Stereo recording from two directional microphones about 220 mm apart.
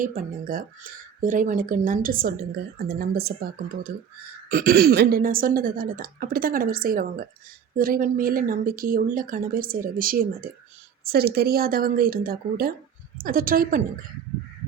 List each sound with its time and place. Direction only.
0.0 s a woman's voice: 40° right (ahead or behind)
4.4 s a woman's voice: 40° right (ahead or behind)